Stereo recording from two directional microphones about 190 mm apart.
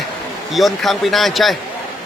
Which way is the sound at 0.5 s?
Centre (ahead or behind).